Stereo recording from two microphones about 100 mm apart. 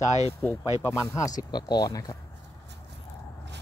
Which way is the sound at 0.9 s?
30° left (ahead or behind).